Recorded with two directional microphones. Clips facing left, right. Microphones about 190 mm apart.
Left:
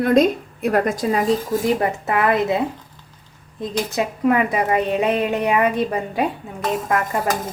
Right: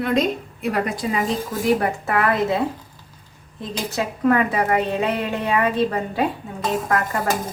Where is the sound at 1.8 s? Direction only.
20° left (ahead or behind).